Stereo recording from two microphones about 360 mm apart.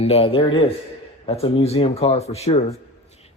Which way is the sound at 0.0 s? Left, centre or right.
Centre.